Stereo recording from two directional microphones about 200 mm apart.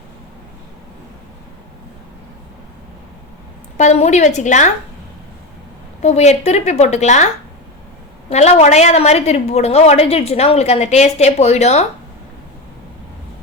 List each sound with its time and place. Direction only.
3.8 s a woman's voice: 35° left (ahead or behind)
6.0 s a woman's voice: 35° left (ahead or behind)
8.3 s a woman's voice: 35° left (ahead or behind)